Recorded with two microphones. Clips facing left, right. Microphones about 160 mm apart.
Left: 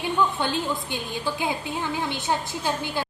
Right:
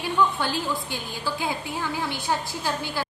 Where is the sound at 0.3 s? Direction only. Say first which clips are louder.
Left 1 dB; 20° left (ahead or behind).